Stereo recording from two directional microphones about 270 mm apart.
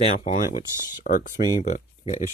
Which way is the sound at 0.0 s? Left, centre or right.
Left.